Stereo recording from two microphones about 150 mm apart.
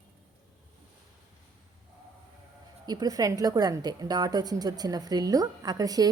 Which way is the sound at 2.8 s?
25° right (ahead or behind).